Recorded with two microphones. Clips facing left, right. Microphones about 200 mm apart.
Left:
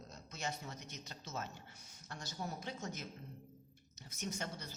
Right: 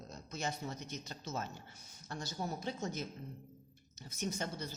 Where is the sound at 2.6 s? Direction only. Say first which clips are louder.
Right 5 dB; 30° right (ahead or behind).